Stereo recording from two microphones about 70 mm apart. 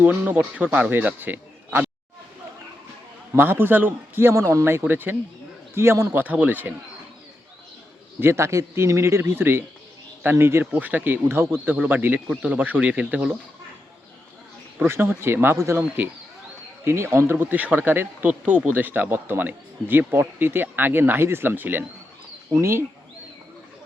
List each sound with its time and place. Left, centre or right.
0.0 s speech: right
3.3 s a man's voice: right
5.7 s a man's voice: right
6.5 s speech: right
8.2 s a man's voice: right; by 13.3 s centre
14.8 s a man's voice: right
16.8 s a man's voice: right
17.3 s speech: right
22.5 s a man's voice: right